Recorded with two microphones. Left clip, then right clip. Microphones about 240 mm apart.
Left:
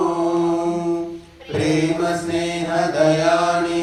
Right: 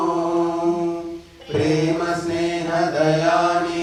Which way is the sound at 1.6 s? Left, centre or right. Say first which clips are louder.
Even; left.